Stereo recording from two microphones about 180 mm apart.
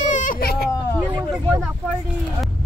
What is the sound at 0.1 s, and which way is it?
Baby cry, 45° left (ahead or behind).